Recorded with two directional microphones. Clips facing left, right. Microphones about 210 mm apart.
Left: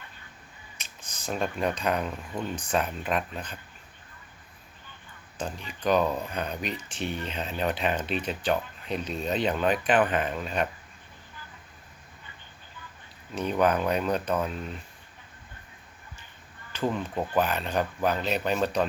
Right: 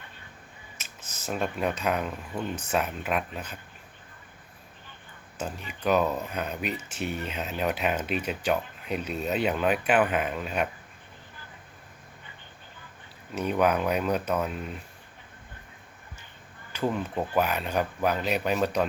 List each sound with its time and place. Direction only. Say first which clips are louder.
0.8 s speech: even; 5° right (ahead or behind)
5.4 s speech: even; 5° right (ahead or behind)
13.3 s speech: even; 10° right (ahead or behind)
16.7 s speech: even; 10° right (ahead or behind)